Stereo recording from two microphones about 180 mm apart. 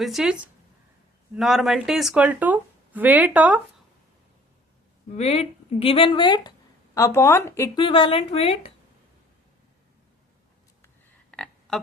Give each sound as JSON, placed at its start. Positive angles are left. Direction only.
{"t": 0.0, "sound": "speech", "side_deg": 0}
{"t": 1.4, "sound": "speech", "side_deg": 0}
{"t": 5.1, "sound": "speech", "side_deg": 35}
{"t": 7.8, "sound": "speech", "side_deg": 30}
{"t": 11.3, "sound": "a sound", "side_deg": 5}